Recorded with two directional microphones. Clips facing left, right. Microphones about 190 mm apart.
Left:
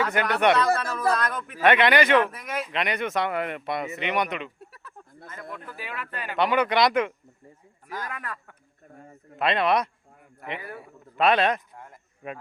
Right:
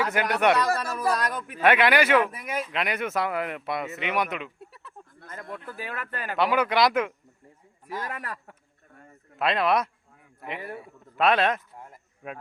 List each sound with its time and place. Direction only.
0.0 s a man's voice: 5° right (ahead or behind)
5.3 s speech: 45° right (ahead or behind)
6.3 s speech: 5° right (ahead or behind)
8.0 s speech: 35° right (ahead or behind)
9.4 s speech: centre (ahead or behind)
10.8 s a sound: centre (ahead or behind)